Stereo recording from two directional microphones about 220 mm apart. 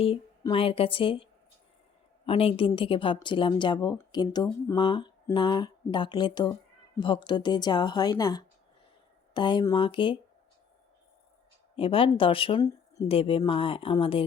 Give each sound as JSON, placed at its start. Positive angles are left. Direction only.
{"t": 0.0, "sound": "speech", "side_deg": 25}
{"t": 11.8, "sound": "speech", "side_deg": 25}